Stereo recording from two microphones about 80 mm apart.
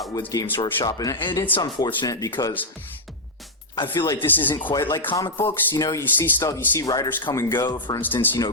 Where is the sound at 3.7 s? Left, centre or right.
Left.